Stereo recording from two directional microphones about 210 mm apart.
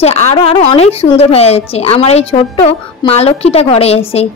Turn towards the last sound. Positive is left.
turn(degrees=30)  # may be behind; listen again after turning